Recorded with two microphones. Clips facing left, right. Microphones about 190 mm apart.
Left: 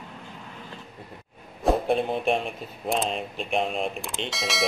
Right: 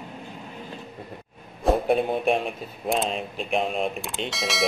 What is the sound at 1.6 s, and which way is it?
Speech, centre (ahead or behind).